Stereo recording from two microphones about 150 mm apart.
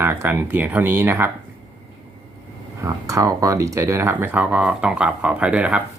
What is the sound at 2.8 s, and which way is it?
Speech, 20° right (ahead or behind).